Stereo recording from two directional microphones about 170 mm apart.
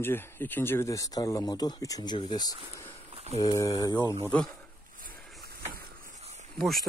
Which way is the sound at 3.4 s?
20° left (ahead or behind).